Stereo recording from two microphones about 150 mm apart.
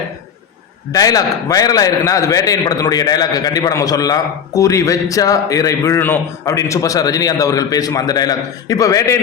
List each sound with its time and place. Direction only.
0.9 s a man's voice: 25° left (ahead or behind)